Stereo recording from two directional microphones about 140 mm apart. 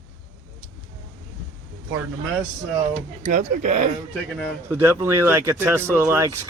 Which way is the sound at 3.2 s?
60° right (ahead or behind).